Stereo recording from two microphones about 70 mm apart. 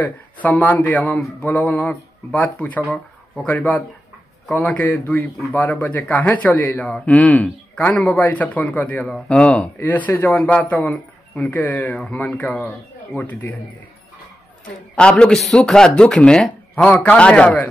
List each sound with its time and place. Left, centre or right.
0.0 s a man's voice: left
6.9 s a man's voice: centre
9.8 s a man's voice: left
10.9 s speech: centre
11.5 s a man's voice: left
14.6 s a man's voice: centre
16.7 s a man's voice: left